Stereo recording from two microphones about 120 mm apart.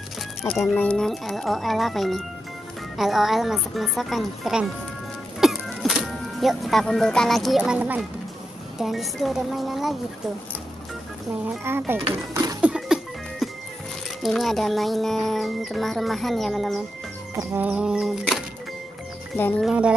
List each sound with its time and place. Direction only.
0.5 s speech: 5° left (ahead or behind)
5.4 s music: centre (ahead or behind)
8.7 s speech: centre (ahead or behind)
11.4 s speech: 20° right (ahead or behind)
12.5 s music: 10° right (ahead or behind)
14.2 s speech: centre (ahead or behind)
17.4 s a sound: 20° right (ahead or behind); by 18.4 s 5° right (ahead or behind)
19.3 s speech: 15° left (ahead or behind)
19.6 s a sound: 5° right (ahead or behind)